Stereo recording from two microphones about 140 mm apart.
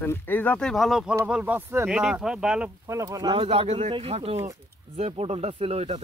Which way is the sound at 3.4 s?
45° right (ahead or behind).